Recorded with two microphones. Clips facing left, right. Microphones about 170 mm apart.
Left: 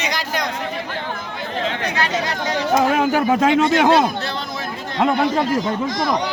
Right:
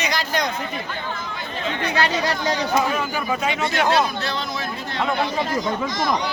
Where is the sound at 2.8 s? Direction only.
90° left.